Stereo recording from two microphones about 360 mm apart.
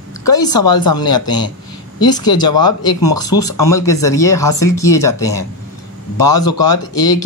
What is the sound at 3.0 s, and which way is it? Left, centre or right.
Speech, left.